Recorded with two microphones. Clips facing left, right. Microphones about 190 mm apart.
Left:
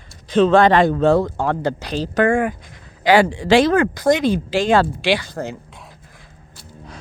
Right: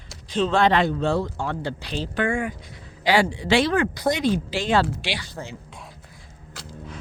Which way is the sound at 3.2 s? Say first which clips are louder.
Left 6 dB; 90° left.